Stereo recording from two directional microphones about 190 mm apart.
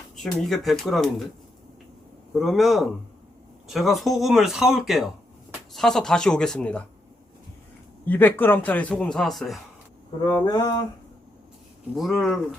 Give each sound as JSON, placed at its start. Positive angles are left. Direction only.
{"t": 0.2, "sound": "speech", "side_deg": 0}
{"t": 2.4, "sound": "speech", "side_deg": 0}
{"t": 8.0, "sound": "a man's voice", "side_deg": 10}
{"t": 10.3, "sound": "a sound", "side_deg": 20}
{"t": 11.9, "sound": "speech", "side_deg": 0}